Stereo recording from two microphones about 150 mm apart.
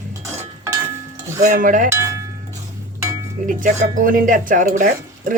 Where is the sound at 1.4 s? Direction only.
60° right (ahead or behind).